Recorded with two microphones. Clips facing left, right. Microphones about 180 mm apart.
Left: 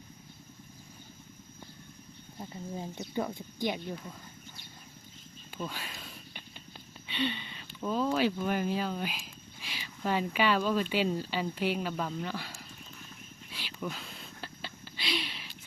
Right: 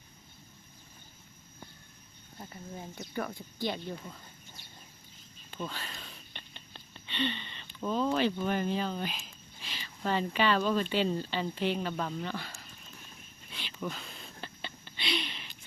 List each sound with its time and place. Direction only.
2.5 s speech: 20° left (ahead or behind)
5.5 s speech: 5° left (ahead or behind)
13.5 s a sound: 5° left (ahead or behind)